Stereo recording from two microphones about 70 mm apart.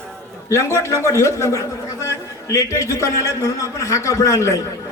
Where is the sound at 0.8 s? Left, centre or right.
Left.